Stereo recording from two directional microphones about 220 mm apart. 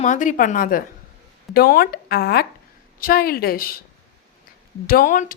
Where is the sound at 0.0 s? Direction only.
35° left (ahead or behind).